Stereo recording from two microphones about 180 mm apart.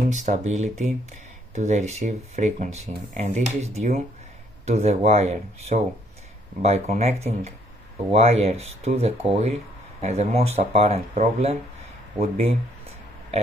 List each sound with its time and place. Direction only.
0.1 s speech: 40° right (ahead or behind)